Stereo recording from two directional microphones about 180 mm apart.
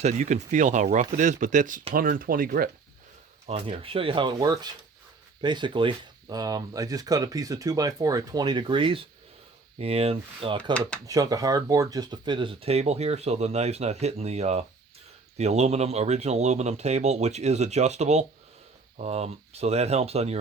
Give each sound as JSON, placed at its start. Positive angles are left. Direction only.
{"t": 0.0, "sound": "speech", "side_deg": -40}
{"t": 3.4, "sound": "speech", "side_deg": -35}
{"t": 10.8, "sound": "speech", "side_deg": 5}
{"t": 11.0, "sound": "speech", "side_deg": -20}